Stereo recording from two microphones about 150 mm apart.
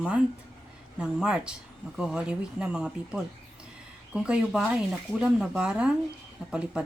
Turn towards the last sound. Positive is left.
turn(degrees=-5)  # may be behind; listen again after turning